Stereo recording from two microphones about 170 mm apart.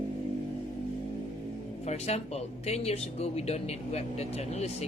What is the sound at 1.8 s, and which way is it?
Speech, 40° left (ahead or behind).